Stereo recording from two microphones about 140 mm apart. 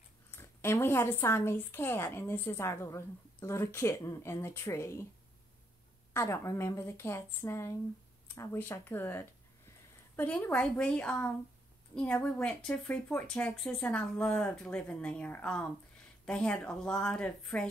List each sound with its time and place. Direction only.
0.3 s speech: 20° left (ahead or behind)
6.1 s speech: 20° left (ahead or behind); by 17.6 s 5° left (ahead or behind)